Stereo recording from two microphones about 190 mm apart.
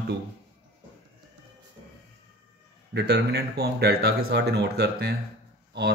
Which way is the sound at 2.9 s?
60° right (ahead or behind).